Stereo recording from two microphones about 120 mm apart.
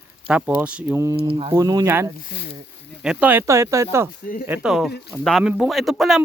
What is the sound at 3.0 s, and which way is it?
Speech, 10° right (ahead or behind).